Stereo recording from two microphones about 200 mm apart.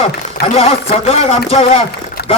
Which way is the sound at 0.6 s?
30° left (ahead or behind).